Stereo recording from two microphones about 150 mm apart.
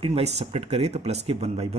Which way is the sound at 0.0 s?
45° right (ahead or behind).